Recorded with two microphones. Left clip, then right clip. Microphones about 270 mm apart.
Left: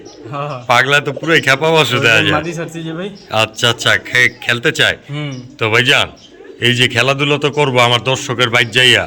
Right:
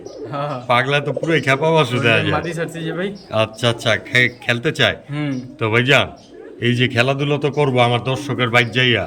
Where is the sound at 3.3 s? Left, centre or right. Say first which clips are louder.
Left 5 dB; centre.